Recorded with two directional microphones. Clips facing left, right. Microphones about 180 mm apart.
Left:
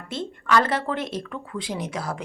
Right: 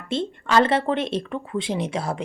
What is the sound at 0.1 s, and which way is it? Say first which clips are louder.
Speech: right 2 dB; 25° right (ahead or behind).